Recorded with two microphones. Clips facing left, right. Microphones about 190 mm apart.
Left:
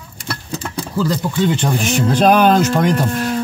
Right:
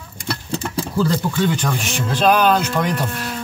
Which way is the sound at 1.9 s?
45° left (ahead or behind).